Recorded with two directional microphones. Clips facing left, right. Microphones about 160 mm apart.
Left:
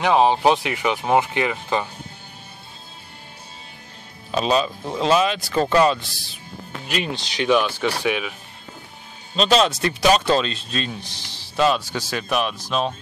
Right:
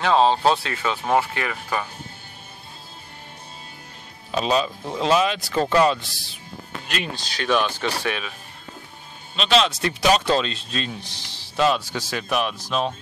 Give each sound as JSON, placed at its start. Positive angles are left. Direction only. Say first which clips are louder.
{"t": 0.0, "sound": "speech", "louder": "left 1 dB", "side_deg": 15}
{"t": 4.3, "sound": "speech", "louder": "left 2 dB", "side_deg": 35}
{"t": 6.9, "sound": "speech", "louder": "left 4 dB", "side_deg": 20}
{"t": 9.3, "sound": "speech", "louder": "left 2 dB", "side_deg": 40}